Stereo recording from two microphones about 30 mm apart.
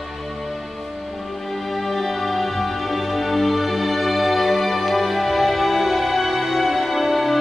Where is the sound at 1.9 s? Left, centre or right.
Centre.